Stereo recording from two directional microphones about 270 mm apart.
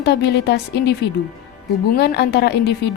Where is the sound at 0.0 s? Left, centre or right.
Left.